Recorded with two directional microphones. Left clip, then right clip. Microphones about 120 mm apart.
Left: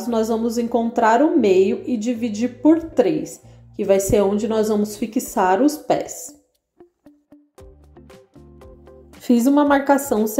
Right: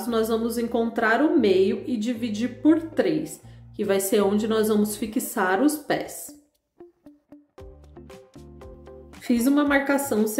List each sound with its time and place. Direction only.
0.0 s a woman's voice: 30° left (ahead or behind)
6.8 s music: centre (ahead or behind)
9.2 s a woman's voice: 30° left (ahead or behind)